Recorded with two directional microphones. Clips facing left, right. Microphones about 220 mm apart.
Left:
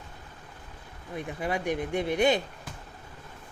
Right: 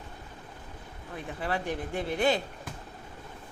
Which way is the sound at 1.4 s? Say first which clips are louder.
Left 3 dB; 15° left (ahead or behind).